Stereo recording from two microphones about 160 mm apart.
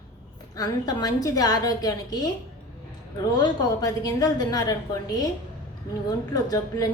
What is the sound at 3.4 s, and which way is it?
A woman's voice, 25° left (ahead or behind).